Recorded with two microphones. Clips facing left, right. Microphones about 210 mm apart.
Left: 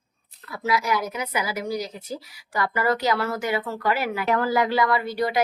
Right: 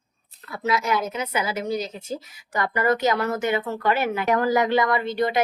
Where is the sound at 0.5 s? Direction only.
25° right (ahead or behind).